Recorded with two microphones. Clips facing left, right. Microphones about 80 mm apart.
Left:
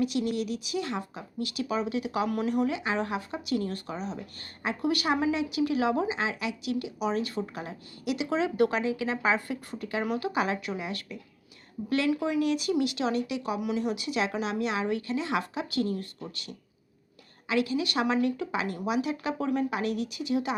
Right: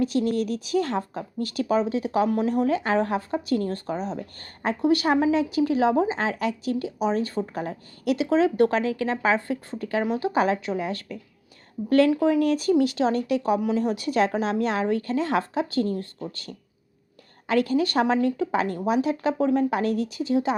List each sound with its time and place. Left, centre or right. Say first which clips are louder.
0.0 s speech: right 5 dB; right